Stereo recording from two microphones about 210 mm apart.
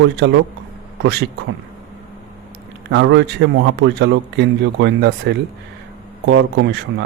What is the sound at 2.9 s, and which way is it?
A man's voice, 60° right (ahead or behind).